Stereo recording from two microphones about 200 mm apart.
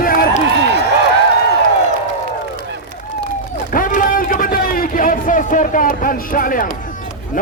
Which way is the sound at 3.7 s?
40° left (ahead or behind).